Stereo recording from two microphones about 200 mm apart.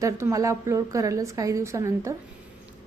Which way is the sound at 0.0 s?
15° right (ahead or behind).